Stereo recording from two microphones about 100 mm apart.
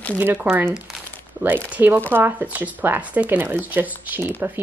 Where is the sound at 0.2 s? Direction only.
20° right (ahead or behind).